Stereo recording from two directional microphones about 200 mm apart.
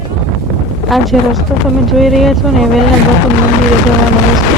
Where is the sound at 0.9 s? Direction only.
Centre (ahead or behind).